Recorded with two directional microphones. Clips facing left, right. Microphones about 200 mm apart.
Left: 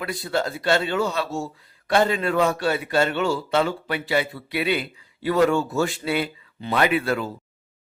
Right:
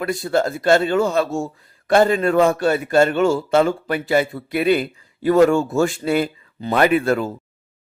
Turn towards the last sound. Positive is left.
turn(degrees=-45)  # may be behind; listen again after turning